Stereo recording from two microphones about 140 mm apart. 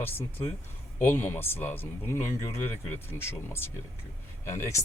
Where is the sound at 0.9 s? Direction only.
15° left (ahead or behind).